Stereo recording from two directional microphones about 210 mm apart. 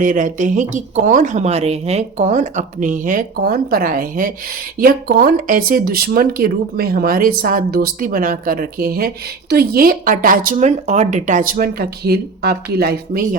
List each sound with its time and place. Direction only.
0.0 s speech: 40° right (ahead or behind)